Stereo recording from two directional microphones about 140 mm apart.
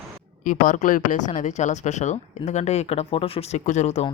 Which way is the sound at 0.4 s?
75° left (ahead or behind).